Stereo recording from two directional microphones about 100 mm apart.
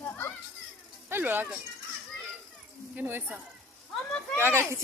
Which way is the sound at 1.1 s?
20° right (ahead or behind).